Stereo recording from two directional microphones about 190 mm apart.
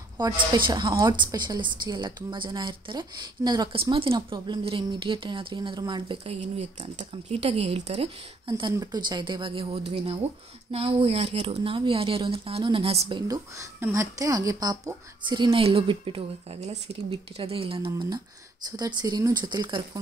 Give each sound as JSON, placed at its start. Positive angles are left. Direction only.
{"t": 0.2, "sound": "a woman's voice", "side_deg": -20}
{"t": 13.3, "sound": "a woman's voice", "side_deg": -15}